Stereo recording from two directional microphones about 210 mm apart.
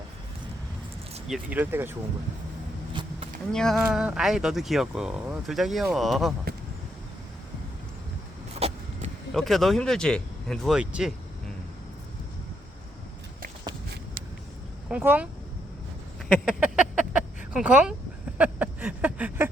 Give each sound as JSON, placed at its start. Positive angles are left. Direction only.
{"t": 1.3, "sound": "speech", "side_deg": -5}
{"t": 2.9, "sound": "a sound", "side_deg": -20}
{"t": 3.5, "sound": "speech", "side_deg": 5}
{"t": 8.5, "sound": "vehicle", "side_deg": -30}
{"t": 9.3, "sound": "speech", "side_deg": 0}
{"t": 14.8, "sound": "speech", "side_deg": -5}
{"t": 16.3, "sound": "a sound", "side_deg": -5}